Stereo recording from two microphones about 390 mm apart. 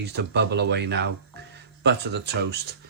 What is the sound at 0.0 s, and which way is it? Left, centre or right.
Speech, right.